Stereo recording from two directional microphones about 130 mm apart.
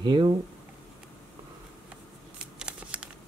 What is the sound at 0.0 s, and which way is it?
Speech, 35° right (ahead or behind).